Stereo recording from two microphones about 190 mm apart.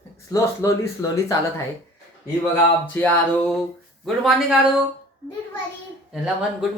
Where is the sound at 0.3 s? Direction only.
20° left (ahead or behind).